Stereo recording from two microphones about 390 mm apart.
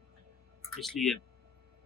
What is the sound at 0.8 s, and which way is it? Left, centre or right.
Speech, centre.